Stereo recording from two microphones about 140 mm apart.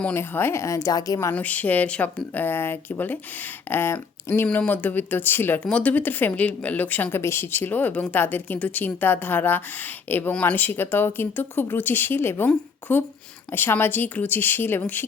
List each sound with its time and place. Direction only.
0.0 s speech: 15° left (ahead or behind)
1.3 s speech: 10° left (ahead or behind)